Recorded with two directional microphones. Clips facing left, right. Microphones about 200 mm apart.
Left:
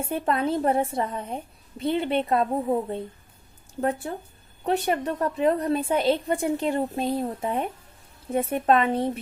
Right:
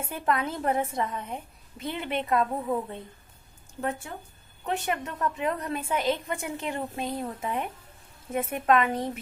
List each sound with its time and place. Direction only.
0.0 s a woman's voice: 30° left (ahead or behind)